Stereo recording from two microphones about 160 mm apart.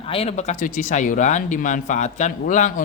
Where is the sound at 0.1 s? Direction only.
40° left (ahead or behind).